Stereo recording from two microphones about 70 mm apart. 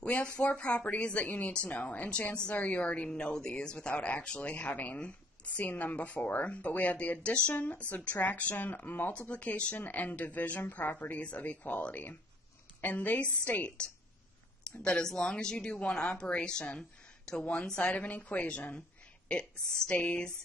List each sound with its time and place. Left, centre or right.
0.0 s a woman's voice: centre
18.6 s a sound: centre
19.9 s speech: centre